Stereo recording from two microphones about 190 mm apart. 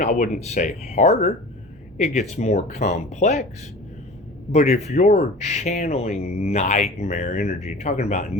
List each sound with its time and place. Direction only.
0.0 s speech: 40° left (ahead or behind)
4.5 s speech: 35° left (ahead or behind)